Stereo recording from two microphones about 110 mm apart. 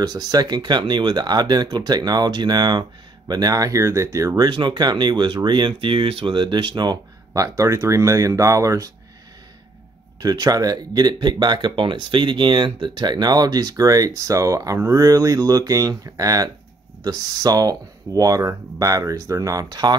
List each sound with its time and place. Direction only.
0.0 s speech: 35° right (ahead or behind)
4.5 s speech: 45° right (ahead or behind)
10.2 s speech: 35° right (ahead or behind)